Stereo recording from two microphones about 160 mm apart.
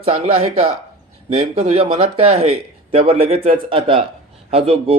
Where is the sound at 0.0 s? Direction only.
35° right (ahead or behind).